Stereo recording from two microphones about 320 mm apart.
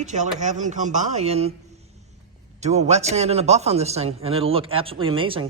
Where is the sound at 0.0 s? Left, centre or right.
Right.